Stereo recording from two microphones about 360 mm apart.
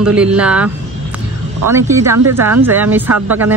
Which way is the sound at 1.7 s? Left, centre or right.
Centre.